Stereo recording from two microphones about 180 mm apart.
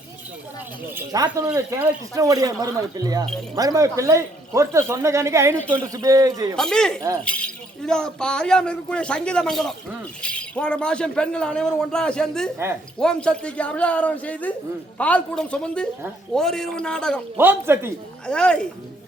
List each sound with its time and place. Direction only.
0.9 s speech: 20° right (ahead or behind)
6.6 s a man's voice: 5° left (ahead or behind)
17.3 s speech: 10° right (ahead or behind)
18.3 s speech: 5° left (ahead or behind)